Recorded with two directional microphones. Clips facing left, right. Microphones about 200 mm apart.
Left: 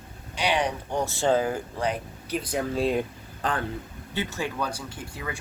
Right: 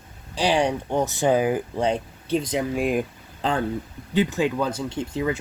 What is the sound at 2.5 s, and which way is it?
Speech, 15° right (ahead or behind).